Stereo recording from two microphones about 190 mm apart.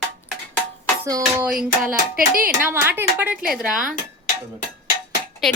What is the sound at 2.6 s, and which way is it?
Speech, 10° right (ahead or behind).